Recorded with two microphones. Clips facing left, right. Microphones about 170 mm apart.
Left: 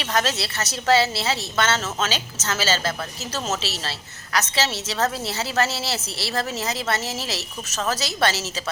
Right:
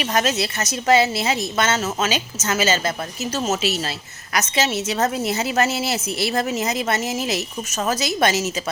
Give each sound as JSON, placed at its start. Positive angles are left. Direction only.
{"t": 0.0, "sound": "a woman's voice", "side_deg": -15}